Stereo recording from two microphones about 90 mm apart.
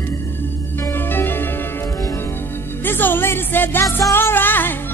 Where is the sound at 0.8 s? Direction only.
25° left (ahead or behind).